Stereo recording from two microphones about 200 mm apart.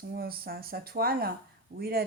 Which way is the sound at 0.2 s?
50° right (ahead or behind).